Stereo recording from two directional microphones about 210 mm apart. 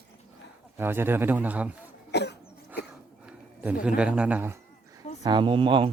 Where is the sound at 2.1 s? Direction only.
55° left (ahead or behind).